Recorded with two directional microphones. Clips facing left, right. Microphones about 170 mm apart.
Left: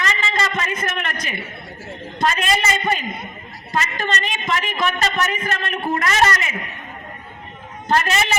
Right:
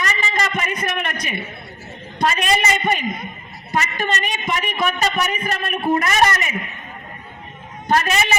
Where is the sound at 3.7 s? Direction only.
15° right (ahead or behind).